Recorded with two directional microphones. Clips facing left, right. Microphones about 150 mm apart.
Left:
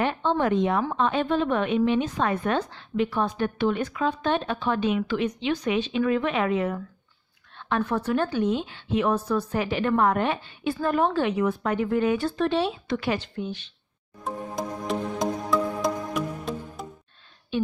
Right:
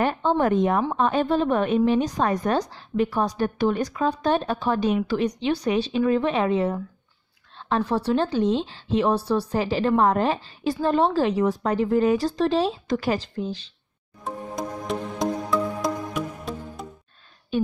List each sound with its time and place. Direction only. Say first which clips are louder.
0.0 s speech: right 2 dB; 40° right (ahead or behind)
14.2 s music: even; centre (ahead or behind)